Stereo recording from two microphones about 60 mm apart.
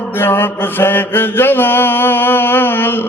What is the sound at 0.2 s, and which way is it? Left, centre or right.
Mantra, left.